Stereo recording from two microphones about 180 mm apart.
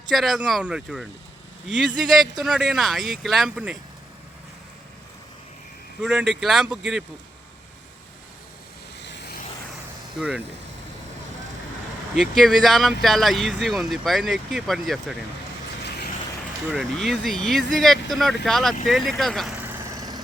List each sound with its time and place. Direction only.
0.1 s speech: centre (ahead or behind)
6.0 s speech: 5° right (ahead or behind)
9.0 s vehicle: 70° left (ahead or behind)
10.2 s speech: 5° right (ahead or behind)
12.2 s speech: centre (ahead or behind)
16.7 s speech: centre (ahead or behind)
19.6 s vehicle: 20° right (ahead or behind)